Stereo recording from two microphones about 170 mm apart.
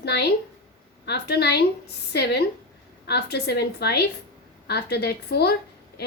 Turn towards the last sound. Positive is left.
turn(degrees=70)  # may be behind; listen again after turning